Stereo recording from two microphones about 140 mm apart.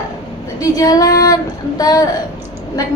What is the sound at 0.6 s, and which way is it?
Female singing, 25° left (ahead or behind).